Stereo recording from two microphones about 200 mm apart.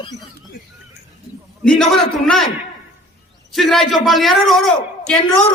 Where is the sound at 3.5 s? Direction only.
Centre (ahead or behind).